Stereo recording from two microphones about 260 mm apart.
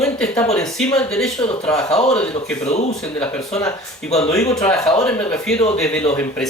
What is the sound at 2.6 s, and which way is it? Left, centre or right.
Speech, left.